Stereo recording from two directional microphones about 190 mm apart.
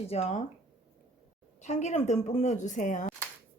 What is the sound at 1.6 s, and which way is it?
Speech, 40° left (ahead or behind).